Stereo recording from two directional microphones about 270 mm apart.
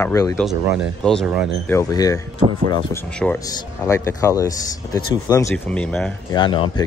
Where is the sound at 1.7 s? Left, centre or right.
Centre.